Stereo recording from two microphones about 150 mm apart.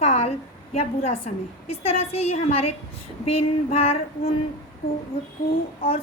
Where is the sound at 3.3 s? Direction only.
40° left (ahead or behind).